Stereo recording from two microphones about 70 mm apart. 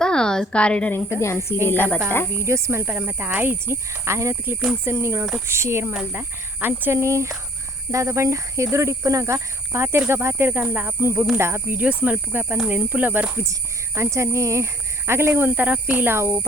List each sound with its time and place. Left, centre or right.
0.0 s a sound: centre
0.9 s speech: left
1.6 s speech: left
2.4 s speech: right
2.8 s speech: right
3.7 s speech: right
6.1 s speech: right
7.0 s speech: right
11.0 s speech: right
11.8 s speech: right
13.3 s speech: right